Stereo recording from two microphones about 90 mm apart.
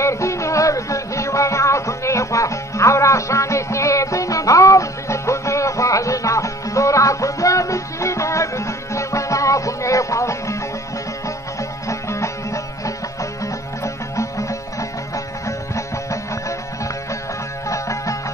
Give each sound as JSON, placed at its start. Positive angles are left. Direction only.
{"t": 0.0, "sound": "music", "side_deg": 35}
{"t": 11.9, "sound": "music", "side_deg": 35}